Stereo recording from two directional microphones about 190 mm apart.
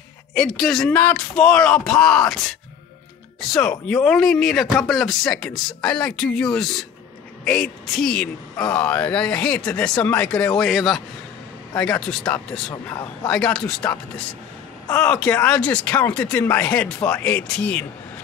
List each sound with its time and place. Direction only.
0.3 s speech: centre (ahead or behind)
12.7 s a man's voice: 20° left (ahead or behind)
13.3 s speech: 5° left (ahead or behind)